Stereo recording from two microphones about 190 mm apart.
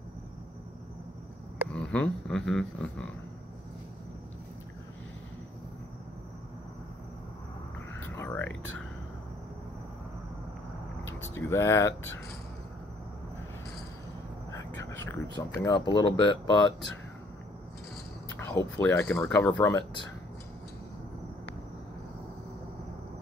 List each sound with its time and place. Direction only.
1.7 s speech: 5° left (ahead or behind)
8.0 s a sound: 10° left (ahead or behind)
11.3 s speech: 15° left (ahead or behind)
15.3 s speech: 25° left (ahead or behind)
18.4 s speech: 10° left (ahead or behind)